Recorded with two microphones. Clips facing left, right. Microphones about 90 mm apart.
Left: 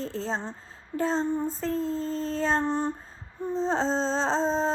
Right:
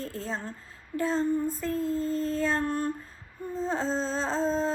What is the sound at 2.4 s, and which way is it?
Music, 30° left (ahead or behind).